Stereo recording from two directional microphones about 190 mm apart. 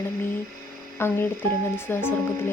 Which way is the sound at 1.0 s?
10° left (ahead or behind).